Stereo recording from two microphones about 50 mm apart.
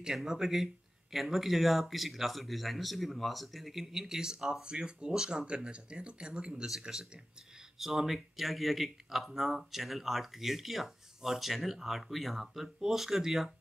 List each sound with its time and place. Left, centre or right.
0.0 s speech: centre